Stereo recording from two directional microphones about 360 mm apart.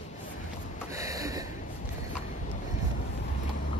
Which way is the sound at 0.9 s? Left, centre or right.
Centre.